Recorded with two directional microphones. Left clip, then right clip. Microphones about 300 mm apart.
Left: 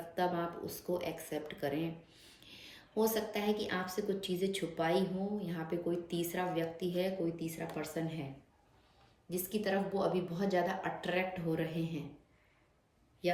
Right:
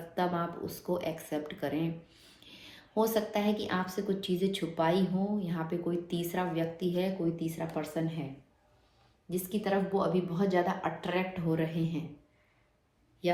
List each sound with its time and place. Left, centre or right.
0.1 s speech: centre
9.3 s speech: centre
13.2 s speech: centre